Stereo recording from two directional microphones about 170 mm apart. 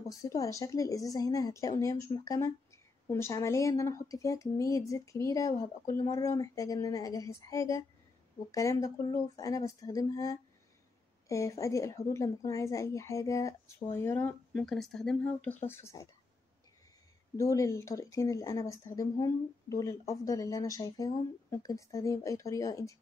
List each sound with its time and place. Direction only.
0.1 s speech: 20° left (ahead or behind)
17.4 s speech: 20° left (ahead or behind)